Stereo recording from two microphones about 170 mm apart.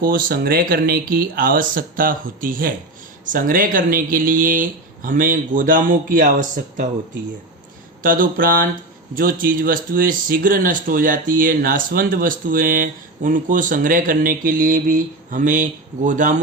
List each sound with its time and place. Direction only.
0.0 s speech: 55° right (ahead or behind)
8.0 s speech: 55° right (ahead or behind)